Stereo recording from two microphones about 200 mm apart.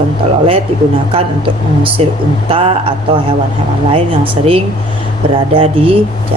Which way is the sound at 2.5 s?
30° right (ahead or behind).